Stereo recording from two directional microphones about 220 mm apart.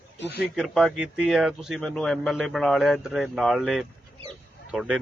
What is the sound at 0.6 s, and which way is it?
A man's voice, centre (ahead or behind).